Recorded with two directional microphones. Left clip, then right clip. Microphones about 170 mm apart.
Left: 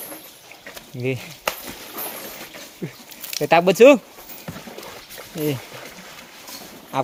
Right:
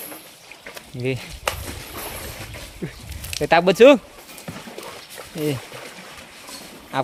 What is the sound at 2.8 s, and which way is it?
Speech, centre (ahead or behind).